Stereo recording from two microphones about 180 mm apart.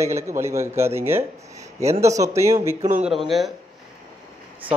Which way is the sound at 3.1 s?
Centre (ahead or behind).